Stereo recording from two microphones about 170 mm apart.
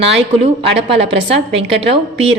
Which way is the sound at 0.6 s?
35° right (ahead or behind).